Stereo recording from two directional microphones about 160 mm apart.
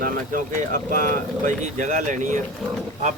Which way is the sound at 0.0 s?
60° right (ahead or behind).